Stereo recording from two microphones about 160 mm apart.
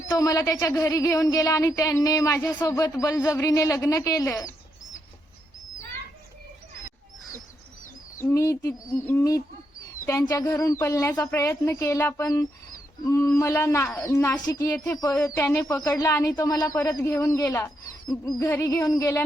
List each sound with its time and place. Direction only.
0.1 s speech: 20° left (ahead or behind)
8.2 s speech: 15° left (ahead or behind)